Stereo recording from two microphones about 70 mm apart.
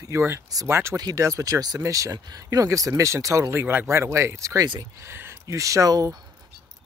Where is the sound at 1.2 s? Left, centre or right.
Right.